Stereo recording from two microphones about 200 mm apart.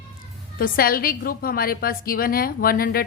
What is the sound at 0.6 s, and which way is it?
A woman's voice, 45° left (ahead or behind).